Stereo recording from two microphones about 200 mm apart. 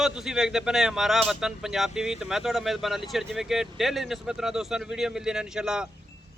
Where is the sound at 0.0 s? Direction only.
Centre (ahead or behind).